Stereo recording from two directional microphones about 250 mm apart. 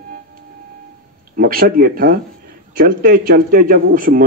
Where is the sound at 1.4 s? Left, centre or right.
Right.